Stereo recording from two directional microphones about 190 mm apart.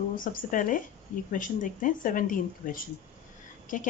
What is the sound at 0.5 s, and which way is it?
A woman's voice, 45° left (ahead or behind).